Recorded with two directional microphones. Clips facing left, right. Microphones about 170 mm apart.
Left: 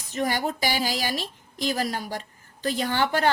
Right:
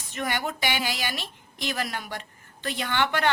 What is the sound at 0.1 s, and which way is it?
A woman's voice, 35° left (ahead or behind).